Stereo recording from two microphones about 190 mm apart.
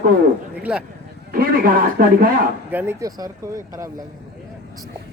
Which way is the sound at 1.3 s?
50° right (ahead or behind).